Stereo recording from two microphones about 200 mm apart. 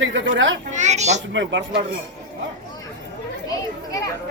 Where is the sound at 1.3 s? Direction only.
65° right (ahead or behind).